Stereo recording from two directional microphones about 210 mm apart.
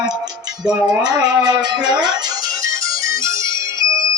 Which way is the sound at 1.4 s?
20° right (ahead or behind).